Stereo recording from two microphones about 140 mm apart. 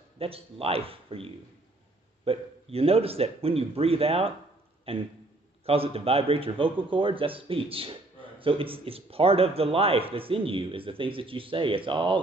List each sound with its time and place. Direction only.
0.2 s a man's voice: 45° right (ahead or behind)